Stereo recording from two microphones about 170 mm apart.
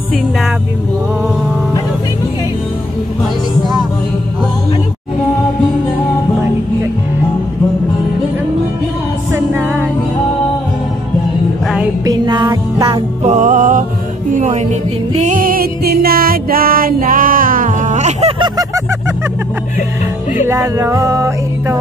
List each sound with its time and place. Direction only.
9.3 s music: 15° right (ahead or behind)
11.6 s music: 5° right (ahead or behind)
12.0 s music: 25° right (ahead or behind)
13.2 s music: 45° right (ahead or behind)
20.4 s music: 15° right (ahead or behind)